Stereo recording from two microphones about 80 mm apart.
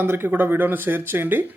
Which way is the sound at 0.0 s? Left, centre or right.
Right.